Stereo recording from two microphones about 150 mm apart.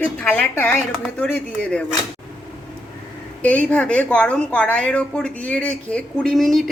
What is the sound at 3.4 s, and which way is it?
A woman's voice, 10° left (ahead or behind).